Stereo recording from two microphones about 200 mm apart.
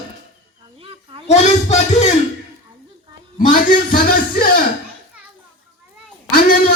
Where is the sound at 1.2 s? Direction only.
35° left (ahead or behind).